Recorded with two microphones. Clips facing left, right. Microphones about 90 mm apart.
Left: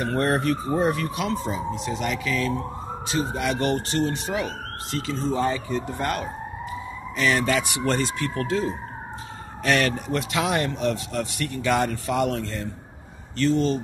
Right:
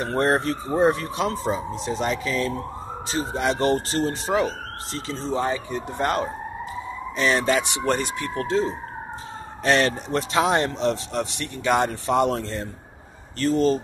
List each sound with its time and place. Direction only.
0.0 s speech: 30° right (ahead or behind)